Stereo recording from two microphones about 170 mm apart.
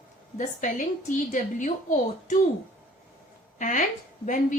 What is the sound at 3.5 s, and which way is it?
A woman's voice, 45° left (ahead or behind).